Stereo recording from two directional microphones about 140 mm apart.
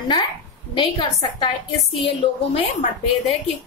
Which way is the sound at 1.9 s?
40° left (ahead or behind).